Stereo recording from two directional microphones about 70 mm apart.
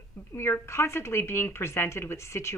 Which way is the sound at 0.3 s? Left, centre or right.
Left.